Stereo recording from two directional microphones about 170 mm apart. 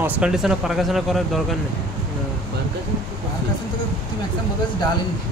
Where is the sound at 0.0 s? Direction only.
5° right (ahead or behind).